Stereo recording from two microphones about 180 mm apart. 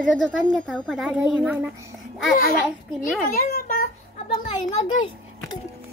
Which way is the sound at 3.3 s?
50° left (ahead or behind).